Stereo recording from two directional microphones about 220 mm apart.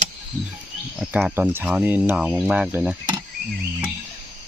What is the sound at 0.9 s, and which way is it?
Speech, 5° right (ahead or behind).